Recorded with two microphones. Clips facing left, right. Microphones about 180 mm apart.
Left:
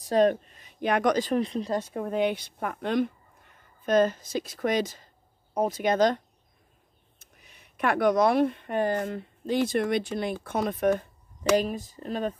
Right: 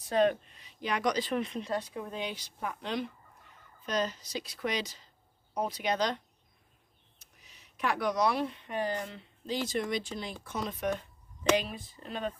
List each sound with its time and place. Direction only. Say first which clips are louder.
0.0 s speech: left 5 dB; 40° left (ahead or behind)